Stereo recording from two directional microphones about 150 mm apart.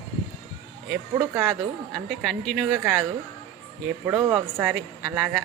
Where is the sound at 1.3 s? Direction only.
10° right (ahead or behind).